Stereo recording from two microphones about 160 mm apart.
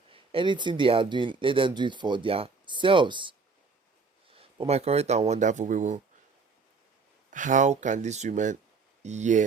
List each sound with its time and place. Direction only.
0.1 s speech: 35° right (ahead or behind); by 6.0 s 50° right (ahead or behind)
7.3 s speech: 55° right (ahead or behind)